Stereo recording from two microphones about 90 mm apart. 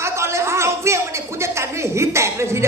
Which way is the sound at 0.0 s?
30° right (ahead or behind).